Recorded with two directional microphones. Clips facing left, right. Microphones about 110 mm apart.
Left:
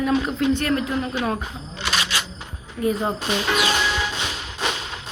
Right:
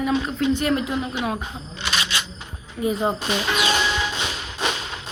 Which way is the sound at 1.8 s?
20° right (ahead or behind).